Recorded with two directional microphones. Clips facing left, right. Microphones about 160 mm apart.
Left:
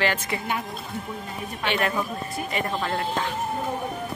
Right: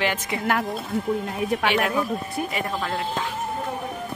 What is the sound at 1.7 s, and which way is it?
Speech, 5° right (ahead or behind).